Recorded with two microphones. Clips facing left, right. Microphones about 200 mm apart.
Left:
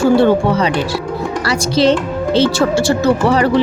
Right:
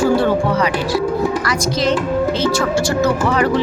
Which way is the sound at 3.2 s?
30° left (ahead or behind).